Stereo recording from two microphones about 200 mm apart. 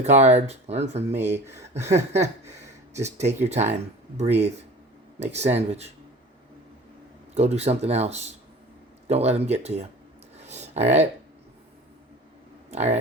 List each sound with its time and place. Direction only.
0.0 s speech: 35° right (ahead or behind)
7.3 s speech: 30° right (ahead or behind)
10.3 s a sound: 35° right (ahead or behind)
12.7 s speech: 35° right (ahead or behind)